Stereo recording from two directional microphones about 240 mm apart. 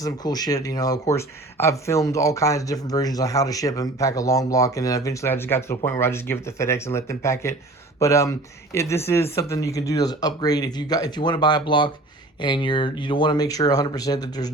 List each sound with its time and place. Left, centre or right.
0.0 s speech: centre